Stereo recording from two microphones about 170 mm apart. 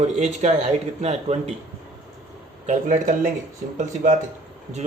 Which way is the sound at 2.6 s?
45° right (ahead or behind).